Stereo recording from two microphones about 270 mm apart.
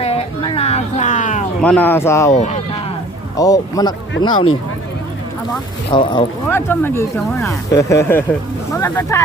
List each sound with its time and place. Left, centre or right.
0.0 s a sound: left
1.6 s speech: centre
2.3 s speech: left
3.3 s speech: centre
5.9 s speech: centre